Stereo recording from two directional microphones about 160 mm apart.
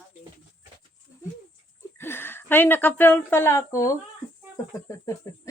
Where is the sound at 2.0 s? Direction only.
15° left (ahead or behind).